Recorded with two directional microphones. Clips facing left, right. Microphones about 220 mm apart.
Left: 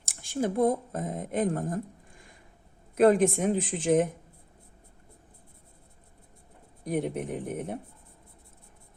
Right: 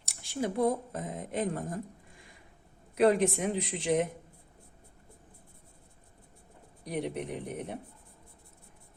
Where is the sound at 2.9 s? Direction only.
50° left (ahead or behind).